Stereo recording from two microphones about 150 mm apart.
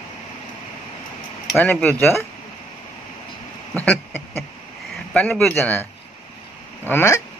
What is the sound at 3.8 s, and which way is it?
Speech, 10° left (ahead or behind).